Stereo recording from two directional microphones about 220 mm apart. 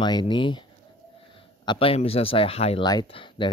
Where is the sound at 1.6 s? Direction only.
25° left (ahead or behind).